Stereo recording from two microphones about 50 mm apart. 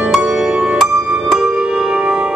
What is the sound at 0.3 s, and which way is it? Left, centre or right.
Music, centre.